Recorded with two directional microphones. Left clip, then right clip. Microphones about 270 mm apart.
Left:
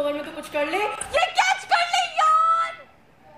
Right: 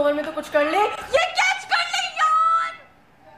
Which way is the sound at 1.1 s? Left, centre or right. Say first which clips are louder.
Left 1 dB; centre.